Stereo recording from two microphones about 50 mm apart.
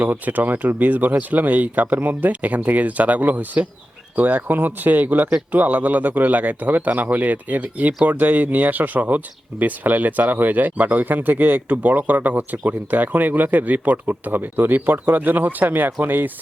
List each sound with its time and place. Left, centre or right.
0.0 s speech: right